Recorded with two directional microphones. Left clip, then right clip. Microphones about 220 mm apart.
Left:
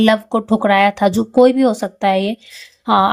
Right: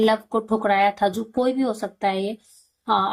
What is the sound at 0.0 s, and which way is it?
Speech, 50° left (ahead or behind).